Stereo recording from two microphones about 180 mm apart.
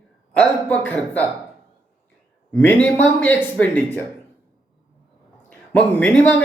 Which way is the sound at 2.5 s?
10° left (ahead or behind).